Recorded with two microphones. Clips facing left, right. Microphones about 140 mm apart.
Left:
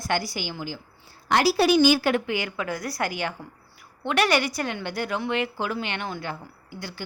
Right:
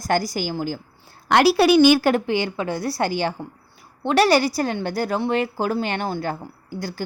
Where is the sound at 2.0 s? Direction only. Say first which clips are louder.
Right 5 dB; 40° right (ahead or behind).